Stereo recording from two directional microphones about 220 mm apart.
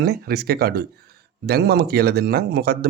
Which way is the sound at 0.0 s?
45° right (ahead or behind).